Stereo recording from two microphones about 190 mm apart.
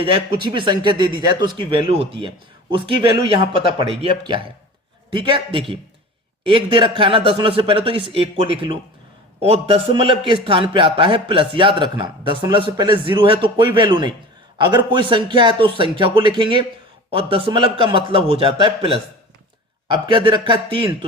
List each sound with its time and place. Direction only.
0.0 s speech: 25° right (ahead or behind)